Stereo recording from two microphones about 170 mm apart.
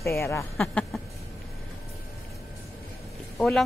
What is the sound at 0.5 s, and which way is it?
Speech, 5° left (ahead or behind).